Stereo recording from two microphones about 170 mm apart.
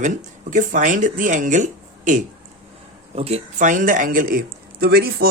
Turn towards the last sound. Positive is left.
turn(degrees=-65)  # may be behind; listen again after turning